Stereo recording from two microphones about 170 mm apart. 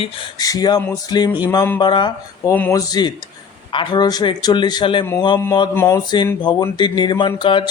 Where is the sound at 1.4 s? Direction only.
15° left (ahead or behind).